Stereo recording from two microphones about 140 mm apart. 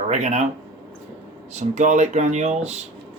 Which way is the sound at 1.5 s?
55° right (ahead or behind).